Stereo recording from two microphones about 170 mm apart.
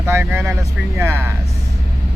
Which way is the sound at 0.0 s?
10° right (ahead or behind).